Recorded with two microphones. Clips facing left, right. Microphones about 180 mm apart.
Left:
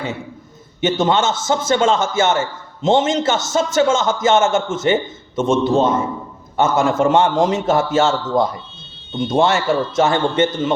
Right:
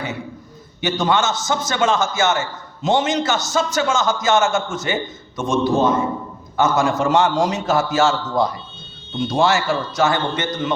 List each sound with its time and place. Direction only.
0.8 s a man's voice: 25° left (ahead or behind)